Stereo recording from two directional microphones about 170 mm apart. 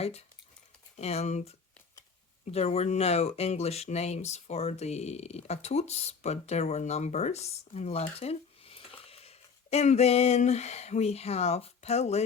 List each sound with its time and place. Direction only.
0.0 s speech: 40° left (ahead or behind)